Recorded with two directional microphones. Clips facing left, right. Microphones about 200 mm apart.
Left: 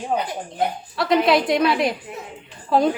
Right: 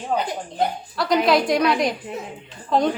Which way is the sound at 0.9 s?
Centre (ahead or behind).